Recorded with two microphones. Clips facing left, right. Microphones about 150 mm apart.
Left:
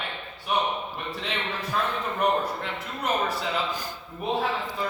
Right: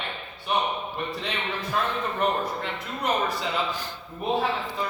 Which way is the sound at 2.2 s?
Centre (ahead or behind).